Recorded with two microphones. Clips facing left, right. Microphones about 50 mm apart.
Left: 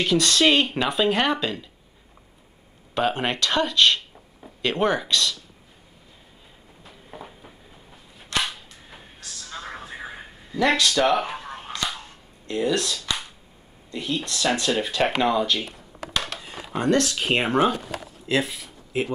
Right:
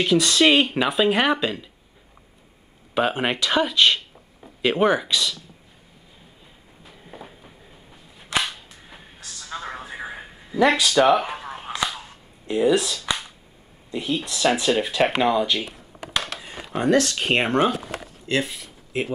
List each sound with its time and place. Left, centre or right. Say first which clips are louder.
0.0 s speech: right 2 dB; centre
2.9 s speech: right 2 dB; centre
6.8 s a sound: even; centre
8.5 s cap gun: even; centre
13.8 s speech: right 2 dB; centre